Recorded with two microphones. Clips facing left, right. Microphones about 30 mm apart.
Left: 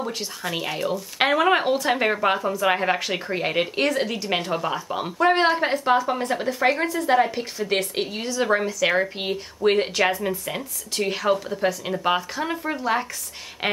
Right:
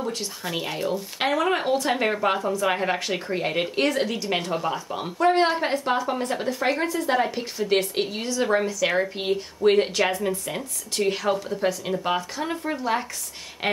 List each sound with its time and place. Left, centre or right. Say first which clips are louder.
0.6 s speech: left 1 dB; centre
1.2 s speech: left 4 dB; left
1.7 s speech: left 1 dB; centre